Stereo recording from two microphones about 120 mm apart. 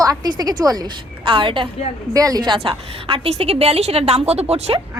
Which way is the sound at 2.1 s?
30° right (ahead or behind).